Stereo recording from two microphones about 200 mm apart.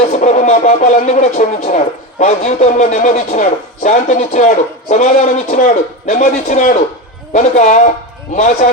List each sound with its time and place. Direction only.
0.0 s speech: 35° left (ahead or behind)